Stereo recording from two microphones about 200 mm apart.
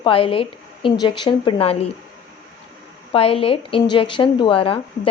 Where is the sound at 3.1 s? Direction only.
30° left (ahead or behind).